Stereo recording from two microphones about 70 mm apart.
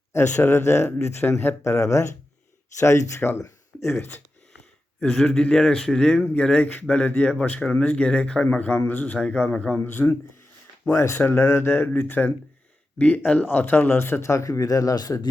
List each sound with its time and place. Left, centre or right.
0.1 s speech: left
4.9 s a man's voice: centre
9.1 s speech: centre; by 10.1 s left
10.9 s speech: left